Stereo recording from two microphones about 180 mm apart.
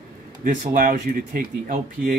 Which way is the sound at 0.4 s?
50° right (ahead or behind).